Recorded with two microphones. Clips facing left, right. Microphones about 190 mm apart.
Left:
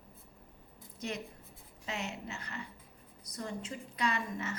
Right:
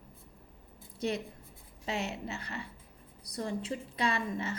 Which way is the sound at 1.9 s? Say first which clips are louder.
Right 4 dB; 35° right (ahead or behind).